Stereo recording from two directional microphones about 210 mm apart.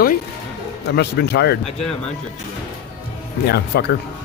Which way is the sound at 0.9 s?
50° left (ahead or behind).